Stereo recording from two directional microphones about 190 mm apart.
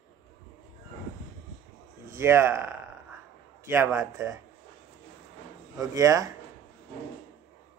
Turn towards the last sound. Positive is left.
turn(degrees=-15)  # may be behind; listen again after turning